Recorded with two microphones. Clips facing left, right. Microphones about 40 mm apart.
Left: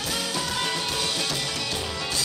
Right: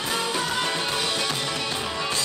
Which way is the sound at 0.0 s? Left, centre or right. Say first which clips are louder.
Right 3 dB; right.